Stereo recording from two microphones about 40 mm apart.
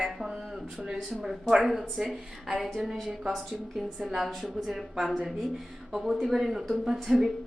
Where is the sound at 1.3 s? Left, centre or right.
Centre.